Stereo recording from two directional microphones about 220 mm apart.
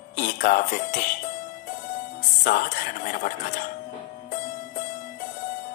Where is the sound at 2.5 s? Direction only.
40° left (ahead or behind).